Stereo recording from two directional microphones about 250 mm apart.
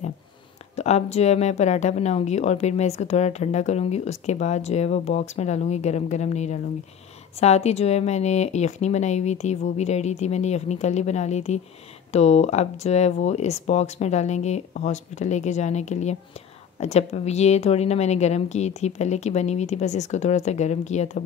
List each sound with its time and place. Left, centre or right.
0.7 s a woman's voice: left